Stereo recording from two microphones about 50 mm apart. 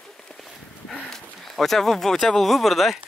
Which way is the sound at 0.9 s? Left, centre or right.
Centre.